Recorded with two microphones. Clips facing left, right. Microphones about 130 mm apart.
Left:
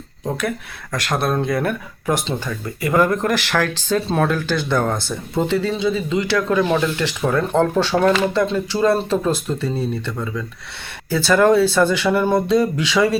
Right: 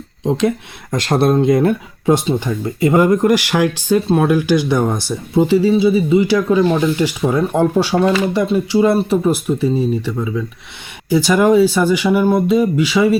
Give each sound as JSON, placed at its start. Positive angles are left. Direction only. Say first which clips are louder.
{"t": 0.3, "sound": "speech", "louder": "right 7 dB", "side_deg": -20}
{"t": 3.0, "sound": "speech", "louder": "right 4 dB", "side_deg": -15}